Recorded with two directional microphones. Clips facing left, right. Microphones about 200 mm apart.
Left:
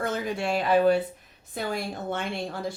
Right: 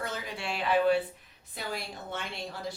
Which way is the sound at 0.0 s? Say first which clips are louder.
Left 8 dB; 50° left (ahead or behind).